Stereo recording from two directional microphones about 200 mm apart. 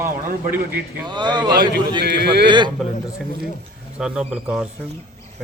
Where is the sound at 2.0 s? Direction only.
55° right (ahead or behind).